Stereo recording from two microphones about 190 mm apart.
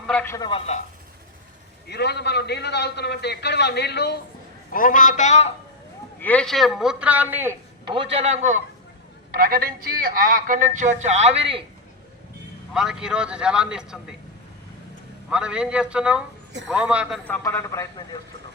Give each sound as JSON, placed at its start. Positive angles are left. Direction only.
{"t": 0.1, "sound": "a man's voice", "side_deg": 5}
{"t": 0.3, "sound": "speech", "side_deg": 25}
{"t": 1.9, "sound": "a man's voice", "side_deg": 60}
{"t": 4.7, "sound": "a man's voice", "side_deg": 45}
{"t": 6.1, "sound": "a man's voice", "side_deg": 10}
{"t": 7.9, "sound": "a man's voice", "side_deg": -30}
{"t": 9.3, "sound": "a man's voice", "side_deg": -50}
{"t": 12.7, "sound": "a man's voice", "side_deg": -5}
{"t": 15.3, "sound": "a man's voice", "side_deg": -5}
{"t": 17.2, "sound": "a man's voice", "side_deg": 10}